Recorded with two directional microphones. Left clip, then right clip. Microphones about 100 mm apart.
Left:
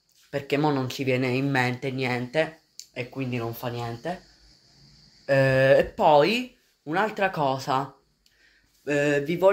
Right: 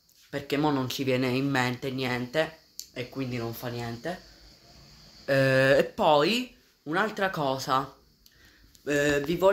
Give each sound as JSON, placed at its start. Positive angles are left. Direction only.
{"t": 0.3, "sound": "speech", "side_deg": -15}
{"t": 1.5, "sound": "speech", "side_deg": -15}
{"t": 5.2, "sound": "speech", "side_deg": -50}
{"t": 5.9, "sound": "speech", "side_deg": -20}
{"t": 8.8, "sound": "speech", "side_deg": -25}